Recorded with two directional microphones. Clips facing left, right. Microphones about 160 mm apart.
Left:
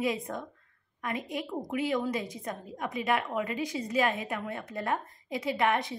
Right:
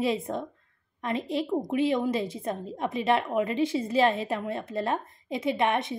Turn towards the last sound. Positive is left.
turn(degrees=-25)  # may be behind; listen again after turning